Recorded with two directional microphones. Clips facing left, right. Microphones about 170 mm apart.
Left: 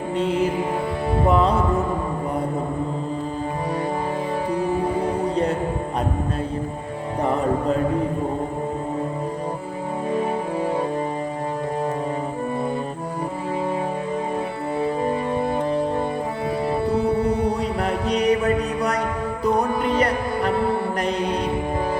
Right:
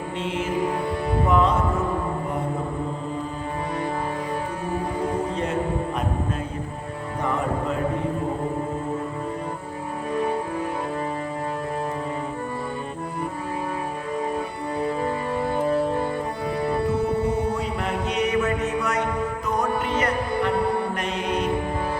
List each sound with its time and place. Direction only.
0.2 s music: 35° left (ahead or behind)
18.1 s music: 35° left (ahead or behind)